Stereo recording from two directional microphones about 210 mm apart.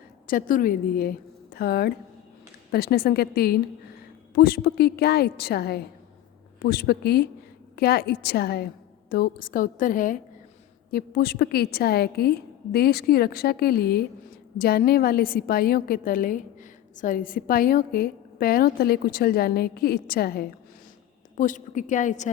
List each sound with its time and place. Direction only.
0.3 s a woman's voice: 40° left (ahead or behind)